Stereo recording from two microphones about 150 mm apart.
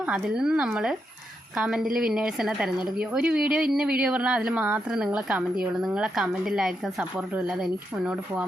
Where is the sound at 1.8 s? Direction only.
75° right (ahead or behind).